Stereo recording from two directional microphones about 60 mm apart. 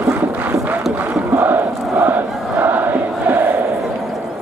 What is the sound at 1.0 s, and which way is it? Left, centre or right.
Crowd, right.